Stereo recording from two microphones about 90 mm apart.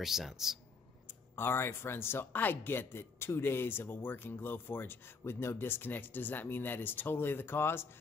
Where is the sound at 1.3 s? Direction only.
25° left (ahead or behind).